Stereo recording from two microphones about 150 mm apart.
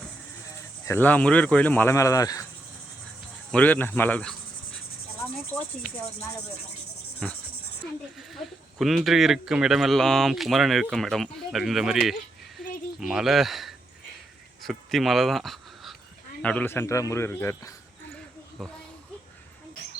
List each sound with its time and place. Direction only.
0.9 s speech: 10° left (ahead or behind)
3.5 s speech: 10° left (ahead or behind)
7.2 s speech: 5° left (ahead or behind)
12.5 s a sound: 5° right (ahead or behind)
14.6 s speech: centre (ahead or behind); by 17.7 s 20° left (ahead or behind)
18.6 s speech: centre (ahead or behind)